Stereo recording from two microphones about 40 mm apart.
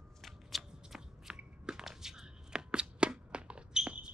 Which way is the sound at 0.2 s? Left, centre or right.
Centre.